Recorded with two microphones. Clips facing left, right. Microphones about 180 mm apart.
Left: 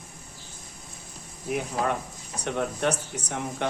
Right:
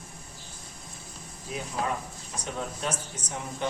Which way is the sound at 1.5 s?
65° left (ahead or behind).